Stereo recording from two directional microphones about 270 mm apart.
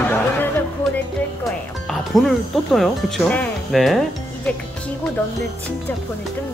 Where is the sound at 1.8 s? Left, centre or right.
Centre.